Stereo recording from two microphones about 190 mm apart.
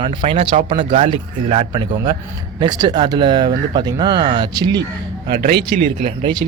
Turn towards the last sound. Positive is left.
turn(degrees=-25)  # may be behind; listen again after turning